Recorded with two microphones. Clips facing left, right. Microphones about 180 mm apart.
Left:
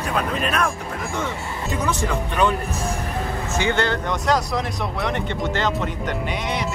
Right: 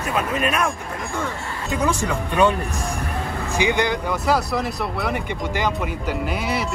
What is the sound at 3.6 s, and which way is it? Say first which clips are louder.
Speech: right 1 dB; 15° right (ahead or behind).